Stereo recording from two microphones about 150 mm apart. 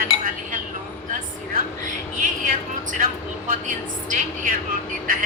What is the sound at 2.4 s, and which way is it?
Speech, 65° right (ahead or behind).